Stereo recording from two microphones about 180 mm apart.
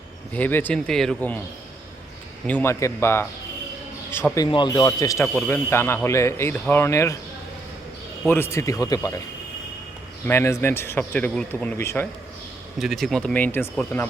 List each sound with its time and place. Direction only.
0.3 s speech: 10° left (ahead or behind)
2.5 s speech: 10° left (ahead or behind)
4.4 s speech: 25° left (ahead or behind)
8.3 s speech: 15° left (ahead or behind)
10.2 s speech: 15° left (ahead or behind)
12.8 s speech: centre (ahead or behind)